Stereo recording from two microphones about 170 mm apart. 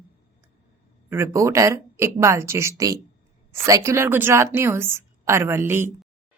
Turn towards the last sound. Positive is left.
turn(degrees=-15)  # may be behind; listen again after turning